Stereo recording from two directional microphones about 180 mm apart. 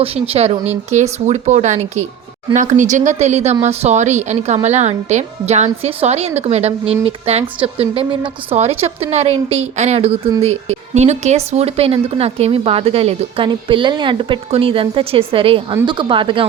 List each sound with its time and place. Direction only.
0.0 s speech: 35° right (ahead or behind)